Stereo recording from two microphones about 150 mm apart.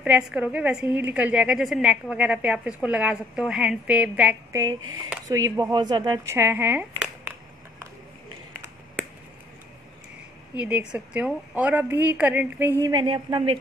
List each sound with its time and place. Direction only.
0.0 s a woman's voice: 10° right (ahead or behind)
4.5 s speech: 20° right (ahead or behind)
6.2 s speech: 15° right (ahead or behind)
10.5 s a woman's voice: 10° right (ahead or behind)
12.9 s a woman's voice: 30° right (ahead or behind)